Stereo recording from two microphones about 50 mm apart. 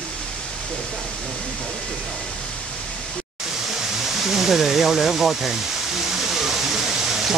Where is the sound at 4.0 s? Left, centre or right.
Centre.